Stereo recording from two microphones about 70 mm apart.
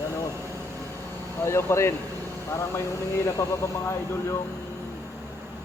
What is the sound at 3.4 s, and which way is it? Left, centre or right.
Speech, left.